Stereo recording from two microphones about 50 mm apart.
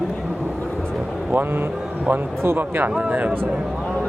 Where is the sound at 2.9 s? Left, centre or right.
Right.